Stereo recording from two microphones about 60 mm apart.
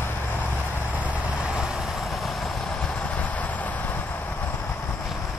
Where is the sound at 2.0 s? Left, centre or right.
Centre.